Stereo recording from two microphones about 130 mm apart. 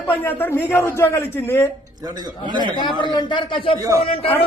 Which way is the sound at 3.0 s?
35° left (ahead or behind).